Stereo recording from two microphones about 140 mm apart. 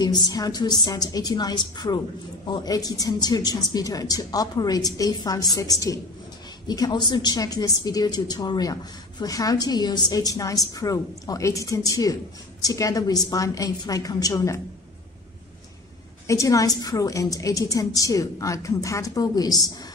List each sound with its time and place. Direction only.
0.0 s a woman's voice: 30° left (ahead or behind)
16.3 s a woman's voice: 25° left (ahead or behind)